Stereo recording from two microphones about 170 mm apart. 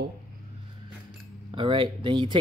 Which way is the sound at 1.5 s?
30° right (ahead or behind).